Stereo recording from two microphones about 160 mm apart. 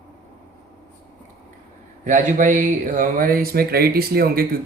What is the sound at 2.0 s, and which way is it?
Speech, 55° right (ahead or behind).